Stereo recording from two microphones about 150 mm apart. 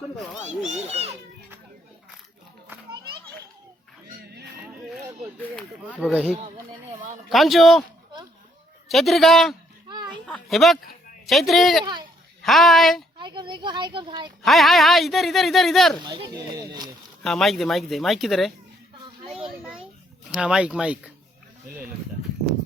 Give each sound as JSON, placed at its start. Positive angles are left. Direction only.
{"t": 0.9, "sound": "speech", "side_deg": -40}
{"t": 5.9, "sound": "speech", "side_deg": 0}
{"t": 7.3, "sound": "speech", "side_deg": 0}
{"t": 8.9, "sound": "speech", "side_deg": 0}
{"t": 13.1, "sound": "speech", "side_deg": -30}
{"t": 14.4, "sound": "speech", "side_deg": 0}
{"t": 16.6, "sound": "speech", "side_deg": -25}
{"t": 17.2, "sound": "speech", "side_deg": 0}
{"t": 19.3, "sound": "children playing", "side_deg": -5}
{"t": 20.3, "sound": "speech", "side_deg": -5}